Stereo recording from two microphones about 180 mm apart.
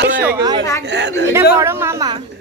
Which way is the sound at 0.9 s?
75° right (ahead or behind).